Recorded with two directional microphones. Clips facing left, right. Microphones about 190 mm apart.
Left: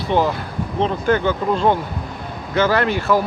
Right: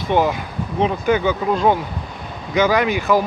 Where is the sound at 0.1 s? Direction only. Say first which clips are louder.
Right 1 dB; 15° right (ahead or behind).